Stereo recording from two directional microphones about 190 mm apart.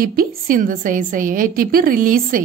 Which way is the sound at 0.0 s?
50° right (ahead or behind).